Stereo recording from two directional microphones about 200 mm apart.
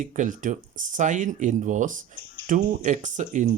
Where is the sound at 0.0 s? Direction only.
40° right (ahead or behind).